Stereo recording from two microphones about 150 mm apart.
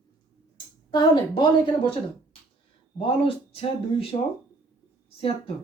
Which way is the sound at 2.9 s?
35° left (ahead or behind).